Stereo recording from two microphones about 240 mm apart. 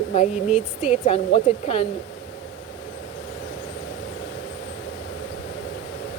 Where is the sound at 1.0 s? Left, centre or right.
Left.